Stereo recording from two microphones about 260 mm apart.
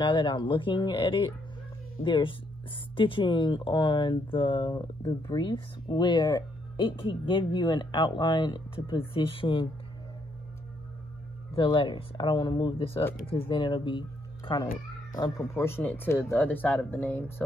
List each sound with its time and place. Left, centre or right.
0.0 s speech: centre
11.5 s speech: centre